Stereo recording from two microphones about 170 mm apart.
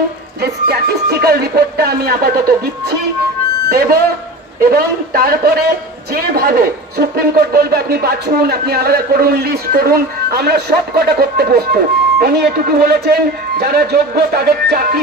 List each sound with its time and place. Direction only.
1.2 s a man's voice: 65° right (ahead or behind)